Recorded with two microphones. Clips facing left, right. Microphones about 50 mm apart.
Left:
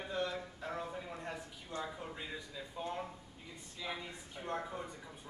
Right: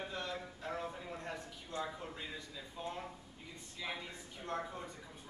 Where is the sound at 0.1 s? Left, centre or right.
Centre.